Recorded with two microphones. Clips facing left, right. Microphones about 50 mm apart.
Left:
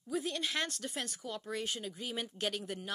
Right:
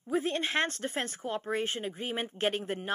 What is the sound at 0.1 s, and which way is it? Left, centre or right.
Speech, right.